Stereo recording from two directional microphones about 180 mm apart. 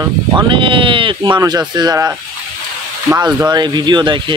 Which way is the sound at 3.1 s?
25° right (ahead or behind).